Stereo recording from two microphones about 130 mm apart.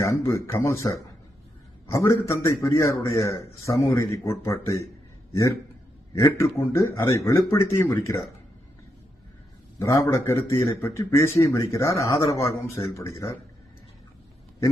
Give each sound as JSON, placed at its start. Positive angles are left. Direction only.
{"t": 0.0, "sound": "a man's voice", "side_deg": 20}
{"t": 6.3, "sound": "a man's voice", "side_deg": 20}
{"t": 9.7, "sound": "a man's voice", "side_deg": 25}